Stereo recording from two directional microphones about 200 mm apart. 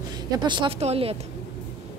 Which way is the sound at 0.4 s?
25° right (ahead or behind).